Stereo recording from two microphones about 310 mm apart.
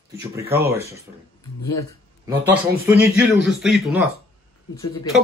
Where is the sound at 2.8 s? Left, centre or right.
Centre.